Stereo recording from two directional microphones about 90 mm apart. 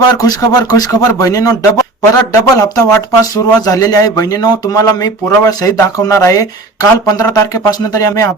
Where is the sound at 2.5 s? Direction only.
40° left (ahead or behind).